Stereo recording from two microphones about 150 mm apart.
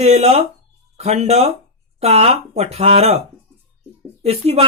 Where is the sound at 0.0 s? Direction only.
45° right (ahead or behind).